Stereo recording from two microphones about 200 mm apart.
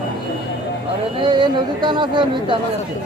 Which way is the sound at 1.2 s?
20° right (ahead or behind).